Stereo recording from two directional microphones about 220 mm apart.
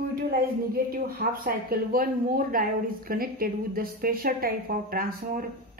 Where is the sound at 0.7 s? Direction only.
40° right (ahead or behind).